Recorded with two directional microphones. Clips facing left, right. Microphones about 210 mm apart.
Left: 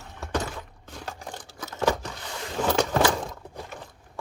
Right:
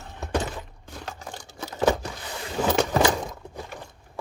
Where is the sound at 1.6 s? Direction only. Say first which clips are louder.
Right 3 dB; 30° right (ahead or behind).